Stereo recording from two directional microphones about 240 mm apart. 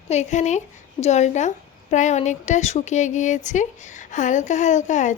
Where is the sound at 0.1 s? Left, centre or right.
Left.